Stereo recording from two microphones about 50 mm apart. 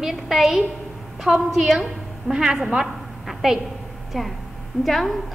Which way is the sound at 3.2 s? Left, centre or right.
Centre.